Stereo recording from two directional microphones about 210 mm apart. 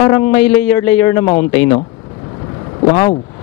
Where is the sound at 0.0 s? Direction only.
10° left (ahead or behind).